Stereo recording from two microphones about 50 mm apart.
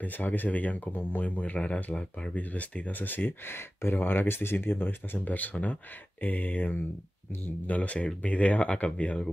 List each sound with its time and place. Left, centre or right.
0.0 s speech: left